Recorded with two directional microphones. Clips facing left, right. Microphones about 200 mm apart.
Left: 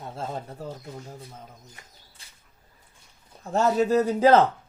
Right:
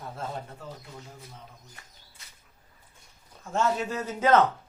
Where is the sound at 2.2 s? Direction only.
30° left (ahead or behind).